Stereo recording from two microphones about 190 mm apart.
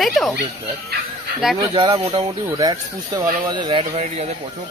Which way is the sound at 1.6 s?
25° right (ahead or behind).